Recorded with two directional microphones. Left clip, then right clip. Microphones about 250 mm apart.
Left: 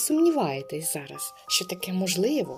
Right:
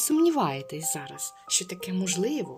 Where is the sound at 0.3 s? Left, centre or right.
Right.